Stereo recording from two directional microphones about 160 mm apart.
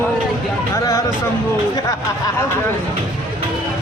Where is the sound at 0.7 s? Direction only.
20° left (ahead or behind).